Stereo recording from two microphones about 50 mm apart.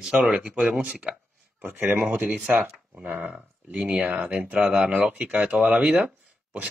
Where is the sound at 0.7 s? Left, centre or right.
Right.